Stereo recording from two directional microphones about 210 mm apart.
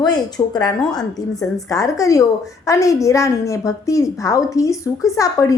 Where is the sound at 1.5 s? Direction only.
15° left (ahead or behind).